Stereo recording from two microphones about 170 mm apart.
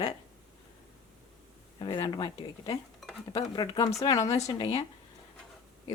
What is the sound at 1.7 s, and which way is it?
Speech, 25° left (ahead or behind).